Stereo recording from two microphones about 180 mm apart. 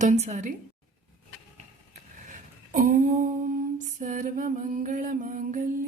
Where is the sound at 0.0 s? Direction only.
40° right (ahead or behind).